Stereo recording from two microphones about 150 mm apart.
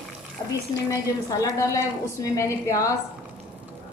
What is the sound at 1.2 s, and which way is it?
A woman's voice, 20° left (ahead or behind).